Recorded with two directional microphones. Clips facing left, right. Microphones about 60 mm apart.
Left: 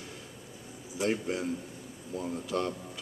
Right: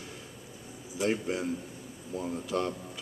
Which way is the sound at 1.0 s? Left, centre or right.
Right.